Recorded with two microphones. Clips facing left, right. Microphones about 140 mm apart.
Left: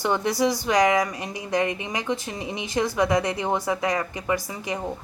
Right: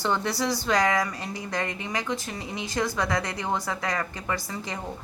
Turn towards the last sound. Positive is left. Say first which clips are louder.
# left 5 dB
turn(degrees=15)  # may be behind; listen again after turning